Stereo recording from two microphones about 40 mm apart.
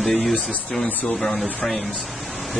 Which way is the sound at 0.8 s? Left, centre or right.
Left.